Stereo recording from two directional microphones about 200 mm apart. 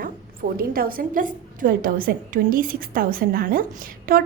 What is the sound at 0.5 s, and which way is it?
A woman's voice, 45° right (ahead or behind).